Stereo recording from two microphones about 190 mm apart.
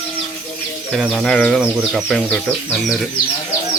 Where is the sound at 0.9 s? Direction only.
Centre (ahead or behind).